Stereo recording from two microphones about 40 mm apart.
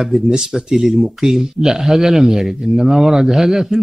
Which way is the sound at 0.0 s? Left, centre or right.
Centre.